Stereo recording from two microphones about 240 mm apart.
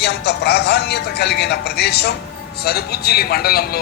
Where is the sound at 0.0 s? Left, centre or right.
Left.